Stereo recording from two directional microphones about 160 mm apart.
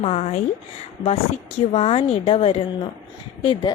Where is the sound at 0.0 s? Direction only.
40° left (ahead or behind).